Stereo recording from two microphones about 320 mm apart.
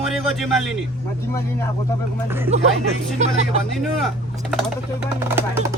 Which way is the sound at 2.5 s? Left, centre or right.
Right.